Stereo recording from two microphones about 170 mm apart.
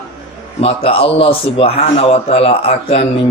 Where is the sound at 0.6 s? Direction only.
35° left (ahead or behind).